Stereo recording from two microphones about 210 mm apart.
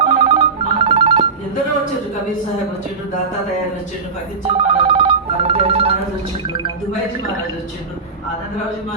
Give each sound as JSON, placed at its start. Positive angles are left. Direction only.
{"t": 0.0, "sound": "telephone bell ringing", "side_deg": -30}
{"t": 4.4, "sound": "telephone bell ringing", "side_deg": -25}